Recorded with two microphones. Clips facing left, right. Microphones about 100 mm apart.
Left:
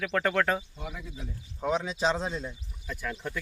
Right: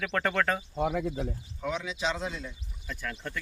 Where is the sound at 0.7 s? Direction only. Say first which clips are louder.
Right 12 dB; 60° right (ahead or behind).